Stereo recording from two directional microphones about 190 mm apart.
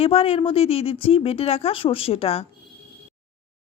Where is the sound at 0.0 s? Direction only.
30° left (ahead or behind).